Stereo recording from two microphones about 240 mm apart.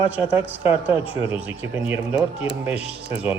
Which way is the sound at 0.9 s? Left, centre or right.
Left.